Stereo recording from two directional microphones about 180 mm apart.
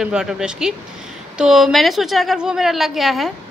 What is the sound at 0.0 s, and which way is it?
A woman's voice, 5° right (ahead or behind).